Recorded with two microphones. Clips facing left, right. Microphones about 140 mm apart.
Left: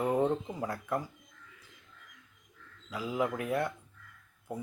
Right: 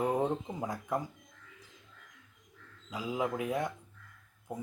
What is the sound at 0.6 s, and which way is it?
Speech, 15° right (ahead or behind).